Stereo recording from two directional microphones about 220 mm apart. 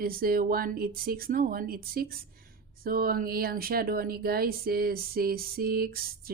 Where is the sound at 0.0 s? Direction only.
40° right (ahead or behind).